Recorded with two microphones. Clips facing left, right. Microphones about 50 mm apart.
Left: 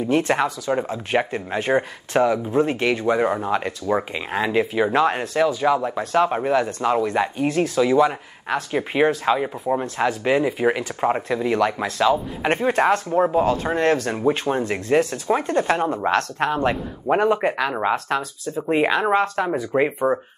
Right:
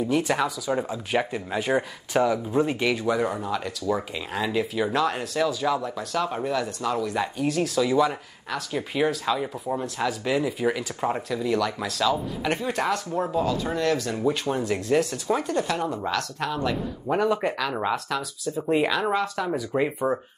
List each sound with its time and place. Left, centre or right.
0.3 s speech: left
17.9 s speech: left